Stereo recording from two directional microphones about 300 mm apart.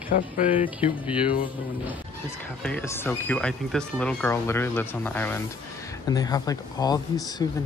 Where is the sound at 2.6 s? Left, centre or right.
Centre.